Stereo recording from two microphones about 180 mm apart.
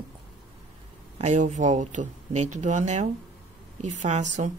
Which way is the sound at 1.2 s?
40° right (ahead or behind).